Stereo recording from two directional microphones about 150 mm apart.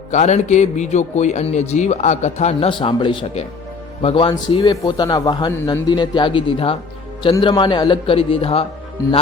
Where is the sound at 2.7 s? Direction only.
35° left (ahead or behind).